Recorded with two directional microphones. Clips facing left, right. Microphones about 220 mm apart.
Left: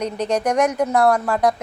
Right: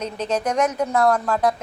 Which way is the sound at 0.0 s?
10° left (ahead or behind).